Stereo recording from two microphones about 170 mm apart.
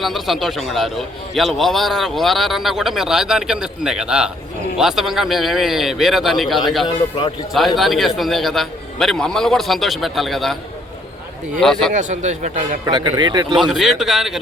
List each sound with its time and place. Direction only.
0.0 s a man's voice: centre (ahead or behind)
6.8 s a man's voice: 30° left (ahead or behind)
7.8 s a man's voice: centre (ahead or behind)
11.6 s a man's voice: 5° left (ahead or behind)
11.9 s speech: 45° right (ahead or behind)
12.8 s a man's voice: 20° right (ahead or behind)
13.6 s a man's voice: centre (ahead or behind)